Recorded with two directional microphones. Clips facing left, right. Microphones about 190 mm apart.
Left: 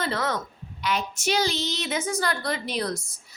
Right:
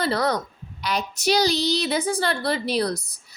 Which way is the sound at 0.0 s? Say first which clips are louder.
Right 5 dB; 35° right (ahead or behind).